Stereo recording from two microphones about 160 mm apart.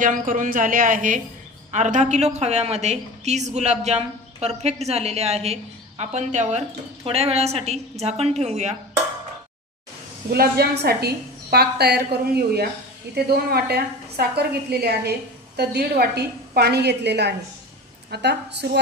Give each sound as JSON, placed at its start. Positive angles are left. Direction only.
{"t": 0.0, "sound": "a woman's voice", "side_deg": -55}
{"t": 10.3, "sound": "a woman's voice", "side_deg": -75}
{"t": 13.1, "sound": "a woman's voice", "side_deg": -85}